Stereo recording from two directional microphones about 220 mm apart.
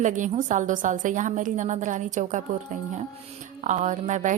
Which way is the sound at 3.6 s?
35° right (ahead or behind).